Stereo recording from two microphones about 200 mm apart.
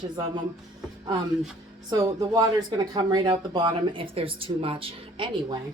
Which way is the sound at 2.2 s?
20° right (ahead or behind).